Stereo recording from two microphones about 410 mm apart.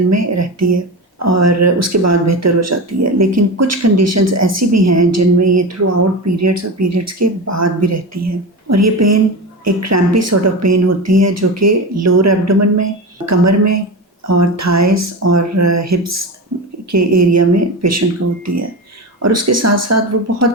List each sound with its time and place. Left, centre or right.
0.1 s speech: right